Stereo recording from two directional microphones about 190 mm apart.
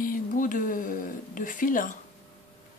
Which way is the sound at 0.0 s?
45° left (ahead or behind).